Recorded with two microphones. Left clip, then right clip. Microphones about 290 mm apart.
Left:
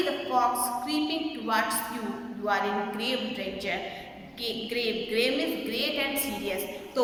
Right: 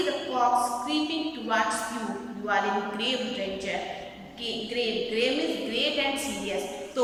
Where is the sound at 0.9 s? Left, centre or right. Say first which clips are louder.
Right 1 dB; centre.